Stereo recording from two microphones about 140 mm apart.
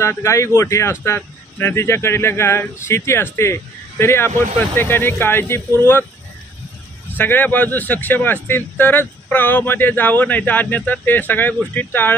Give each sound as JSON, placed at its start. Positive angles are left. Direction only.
{"t": 0.0, "sound": "speech", "side_deg": 20}
{"t": 7.2, "sound": "speech", "side_deg": 15}